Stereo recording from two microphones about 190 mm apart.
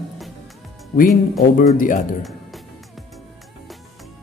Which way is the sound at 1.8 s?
45° left (ahead or behind).